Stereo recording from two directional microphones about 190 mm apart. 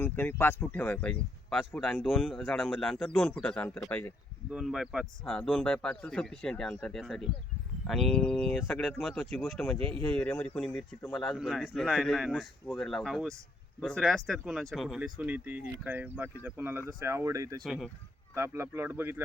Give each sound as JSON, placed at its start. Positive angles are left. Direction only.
{"t": 0.0, "sound": "speech", "side_deg": 10}
{"t": 4.5, "sound": "speech", "side_deg": -5}
{"t": 17.6, "sound": "speech", "side_deg": 0}
{"t": 18.3, "sound": "speech", "side_deg": -15}